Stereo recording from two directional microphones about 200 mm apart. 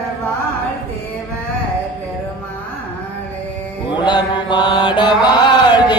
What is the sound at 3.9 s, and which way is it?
Mantra, 20° left (ahead or behind).